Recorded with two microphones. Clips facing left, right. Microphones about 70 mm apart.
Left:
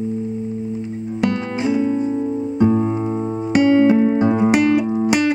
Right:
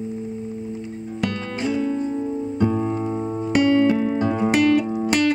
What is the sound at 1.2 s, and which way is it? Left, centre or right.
Music, centre.